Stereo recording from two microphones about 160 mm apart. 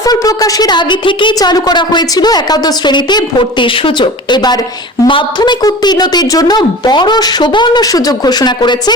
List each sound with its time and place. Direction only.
0.0 s a woman's voice: 20° left (ahead or behind)